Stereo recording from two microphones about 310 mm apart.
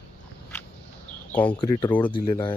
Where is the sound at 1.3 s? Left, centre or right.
Centre.